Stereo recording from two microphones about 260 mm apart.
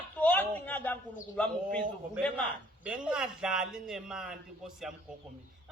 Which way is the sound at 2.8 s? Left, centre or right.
Centre.